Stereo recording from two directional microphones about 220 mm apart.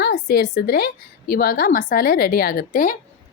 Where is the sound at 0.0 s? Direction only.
45° left (ahead or behind).